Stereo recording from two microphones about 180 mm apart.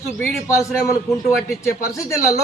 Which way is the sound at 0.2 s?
Centre (ahead or behind).